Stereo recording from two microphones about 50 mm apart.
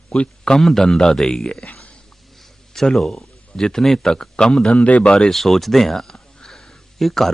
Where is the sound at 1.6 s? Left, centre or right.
Left.